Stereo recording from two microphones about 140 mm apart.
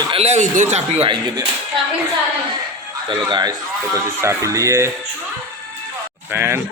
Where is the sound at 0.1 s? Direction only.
50° right (ahead or behind).